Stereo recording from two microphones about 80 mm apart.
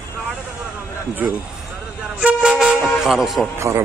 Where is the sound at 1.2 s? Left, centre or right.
Right.